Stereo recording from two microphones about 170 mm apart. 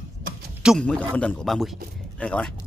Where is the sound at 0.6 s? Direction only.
5° left (ahead or behind).